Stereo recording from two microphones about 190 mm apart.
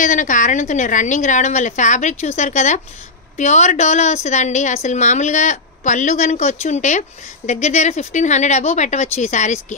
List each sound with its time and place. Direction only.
0.0 s a woman's voice: 40° left (ahead or behind)